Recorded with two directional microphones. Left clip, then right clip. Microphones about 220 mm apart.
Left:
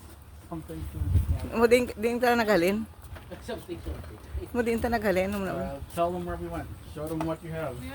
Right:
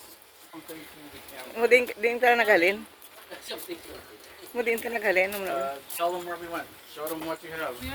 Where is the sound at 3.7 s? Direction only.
20° right (ahead or behind).